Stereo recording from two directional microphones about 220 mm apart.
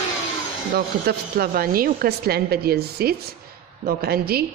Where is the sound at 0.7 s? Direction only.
45° right (ahead or behind).